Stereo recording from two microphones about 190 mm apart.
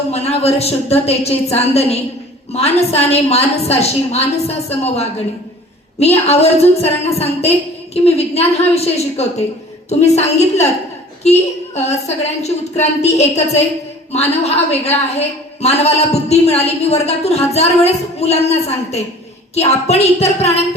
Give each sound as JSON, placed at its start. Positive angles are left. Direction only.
{"t": 0.1, "sound": "a woman's voice", "side_deg": 35}